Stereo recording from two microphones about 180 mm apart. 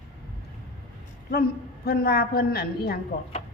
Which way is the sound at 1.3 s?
55° left (ahead or behind).